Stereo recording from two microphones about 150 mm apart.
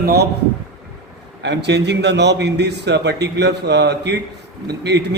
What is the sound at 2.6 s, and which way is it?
A man's voice, 90° right.